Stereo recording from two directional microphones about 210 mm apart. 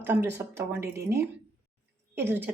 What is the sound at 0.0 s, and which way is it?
A woman's voice, 10° right (ahead or behind).